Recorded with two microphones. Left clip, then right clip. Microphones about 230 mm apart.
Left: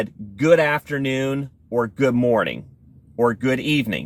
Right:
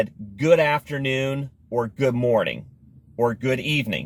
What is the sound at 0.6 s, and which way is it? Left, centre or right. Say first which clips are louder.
Speech: left 1 dB; centre.